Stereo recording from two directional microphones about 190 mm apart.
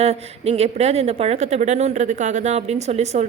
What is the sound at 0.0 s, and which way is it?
Speech, 35° right (ahead or behind).